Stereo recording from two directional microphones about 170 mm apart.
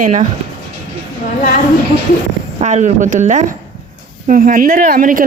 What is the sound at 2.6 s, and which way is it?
A woman's voice, 45° right (ahead or behind).